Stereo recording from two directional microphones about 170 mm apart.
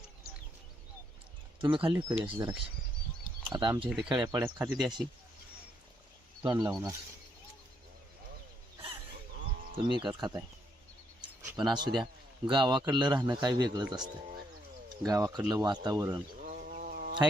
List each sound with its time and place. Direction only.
1.6 s a man's voice: 30° right (ahead or behind)
4.4 s speech: 10° right (ahead or behind)
6.4 s a man's voice: 20° right (ahead or behind)
9.9 s a man's voice: 25° right (ahead or behind)
11.2 s a sound: 25° right (ahead or behind)
12.5 s a man's voice: 25° right (ahead or behind)
16.4 s a sound: 50° right (ahead or behind)